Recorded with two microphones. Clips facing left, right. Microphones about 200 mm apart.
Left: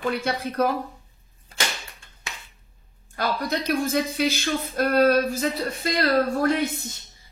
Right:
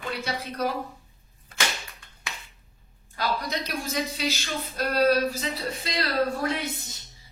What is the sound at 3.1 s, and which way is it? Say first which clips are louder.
Speech: left 3 dB; 50° left (ahead or behind).